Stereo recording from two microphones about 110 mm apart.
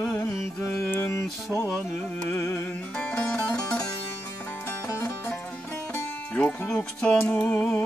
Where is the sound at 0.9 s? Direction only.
25° left (ahead or behind).